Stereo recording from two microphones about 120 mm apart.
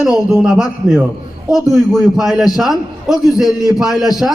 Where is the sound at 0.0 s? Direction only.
5° right (ahead or behind).